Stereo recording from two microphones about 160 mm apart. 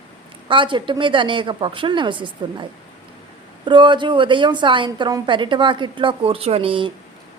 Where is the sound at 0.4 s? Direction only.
30° right (ahead or behind).